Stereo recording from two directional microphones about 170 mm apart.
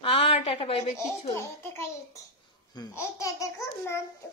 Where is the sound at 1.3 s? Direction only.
15° left (ahead or behind).